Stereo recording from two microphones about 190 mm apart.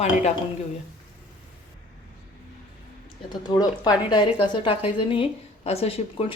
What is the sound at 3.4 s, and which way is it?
A woman's voice, 20° left (ahead or behind).